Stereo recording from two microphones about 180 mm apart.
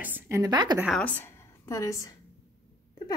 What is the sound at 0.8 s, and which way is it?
A woman's voice, 5° left (ahead or behind).